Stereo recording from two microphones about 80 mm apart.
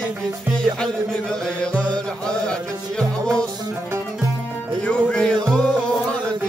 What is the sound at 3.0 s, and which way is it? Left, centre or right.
Music, centre.